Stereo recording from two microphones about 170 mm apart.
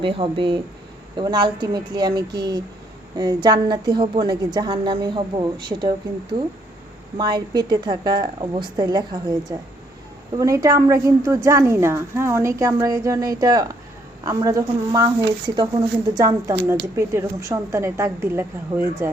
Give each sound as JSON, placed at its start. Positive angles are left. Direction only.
{"t": 0.0, "sound": "a woman's voice", "side_deg": -30}